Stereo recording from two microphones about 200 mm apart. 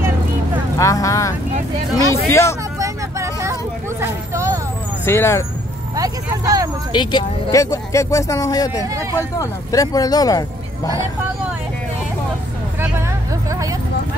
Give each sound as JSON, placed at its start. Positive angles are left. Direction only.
{"t": 0.7, "sound": "speech", "side_deg": 15}
{"t": 2.8, "sound": "vehicle", "side_deg": -15}
{"t": 4.0, "sound": "a sound", "side_deg": -15}
{"t": 5.0, "sound": "speech", "side_deg": 15}
{"t": 5.9, "sound": "speech", "side_deg": -20}
{"t": 6.9, "sound": "speech", "side_deg": 20}
{"t": 13.5, "sound": "a sound", "side_deg": -15}